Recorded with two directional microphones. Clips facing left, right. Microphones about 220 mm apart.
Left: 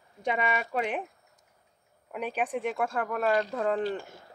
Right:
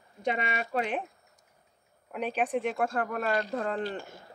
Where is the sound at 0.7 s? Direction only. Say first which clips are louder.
Right 3 dB; 10° left (ahead or behind).